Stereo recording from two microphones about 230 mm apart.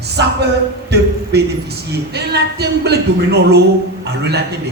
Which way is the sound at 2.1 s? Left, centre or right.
Right.